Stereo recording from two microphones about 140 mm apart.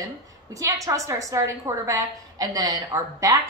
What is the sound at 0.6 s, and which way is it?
A woman's voice, 25° right (ahead or behind).